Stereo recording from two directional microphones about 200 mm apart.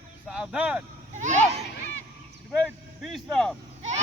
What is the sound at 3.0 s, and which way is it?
Vehicle, centre (ahead or behind).